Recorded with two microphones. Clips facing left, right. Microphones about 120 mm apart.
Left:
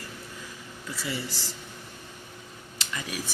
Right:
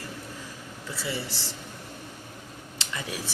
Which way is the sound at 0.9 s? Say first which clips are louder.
Right 1 dB; 30° right (ahead or behind).